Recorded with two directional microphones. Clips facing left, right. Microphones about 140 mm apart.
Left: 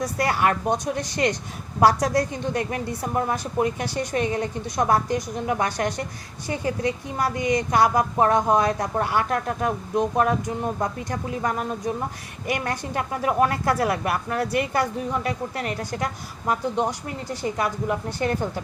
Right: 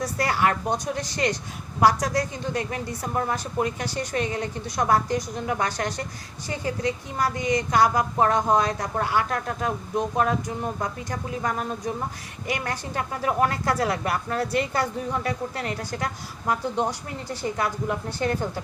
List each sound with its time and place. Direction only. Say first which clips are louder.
0.0 s a woman's voice: left 1 dB; 20° left (ahead or behind)
17.2 s a woman's voice: left 1 dB; 20° left (ahead or behind)